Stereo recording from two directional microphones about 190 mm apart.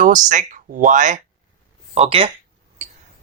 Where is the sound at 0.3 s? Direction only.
40° right (ahead or behind).